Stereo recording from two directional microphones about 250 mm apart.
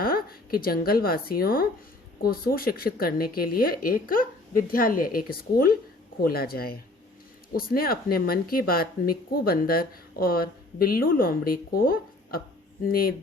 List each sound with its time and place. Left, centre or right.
0.0 s a woman's voice: left